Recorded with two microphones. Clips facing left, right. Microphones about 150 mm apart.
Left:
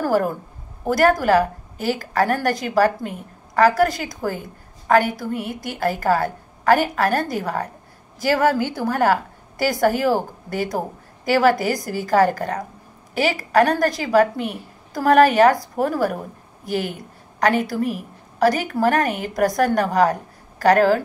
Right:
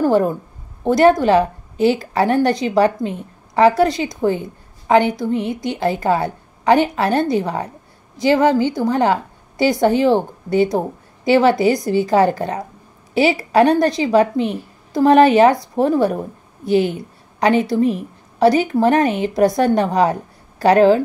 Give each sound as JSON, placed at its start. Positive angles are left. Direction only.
{"t": 0.0, "sound": "a woman's voice", "side_deg": -25}
{"t": 15.0, "sound": "speech", "side_deg": -25}
{"t": 17.6, "sound": "speech", "side_deg": -25}